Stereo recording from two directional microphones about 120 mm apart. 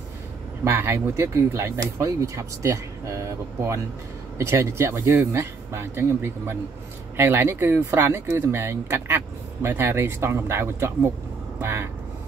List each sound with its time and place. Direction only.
0.7 s speech: 25° right (ahead or behind)